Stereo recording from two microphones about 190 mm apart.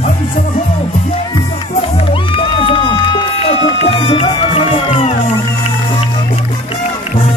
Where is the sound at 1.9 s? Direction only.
25° left (ahead or behind).